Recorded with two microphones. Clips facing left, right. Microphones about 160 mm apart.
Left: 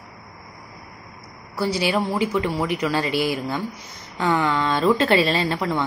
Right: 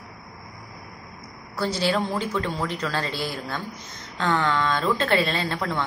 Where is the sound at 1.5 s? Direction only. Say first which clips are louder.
Left 2 dB; 10° left (ahead or behind).